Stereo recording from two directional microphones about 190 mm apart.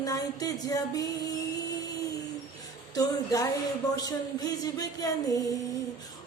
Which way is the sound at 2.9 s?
20° left (ahead or behind).